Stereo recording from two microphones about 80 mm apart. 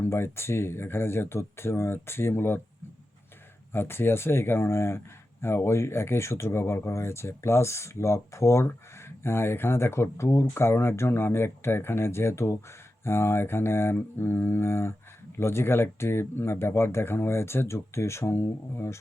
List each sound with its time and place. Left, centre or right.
0.0 s speech: left
3.7 s speech: left